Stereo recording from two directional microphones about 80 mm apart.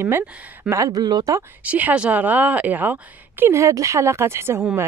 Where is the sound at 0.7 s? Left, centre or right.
Right.